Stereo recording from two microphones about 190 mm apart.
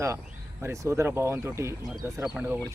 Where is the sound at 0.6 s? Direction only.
15° right (ahead or behind).